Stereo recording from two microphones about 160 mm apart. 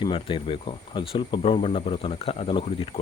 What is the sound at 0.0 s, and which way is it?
Speech, 30° left (ahead or behind).